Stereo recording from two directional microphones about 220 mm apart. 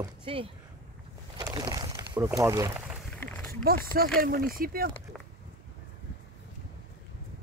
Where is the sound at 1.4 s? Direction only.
20° right (ahead or behind).